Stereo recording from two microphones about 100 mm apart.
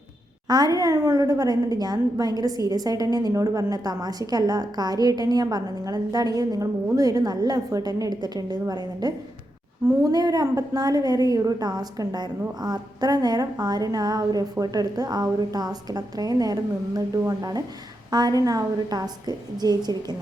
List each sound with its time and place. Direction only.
0.4 s a woman's voice: 45° right (ahead or behind)